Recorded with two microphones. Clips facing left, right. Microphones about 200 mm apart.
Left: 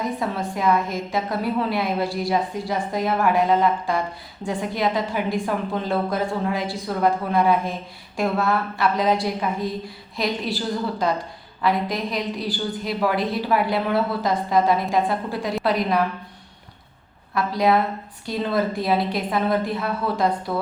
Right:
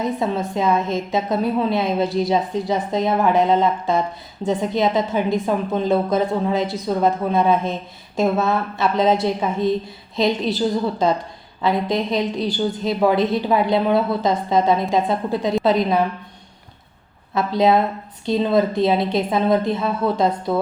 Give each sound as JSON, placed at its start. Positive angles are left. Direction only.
{"t": 0.2, "sound": "a woman's voice", "side_deg": -20}
{"t": 11.6, "sound": "a woman's voice", "side_deg": -25}
{"t": 17.3, "sound": "a woman's voice", "side_deg": -25}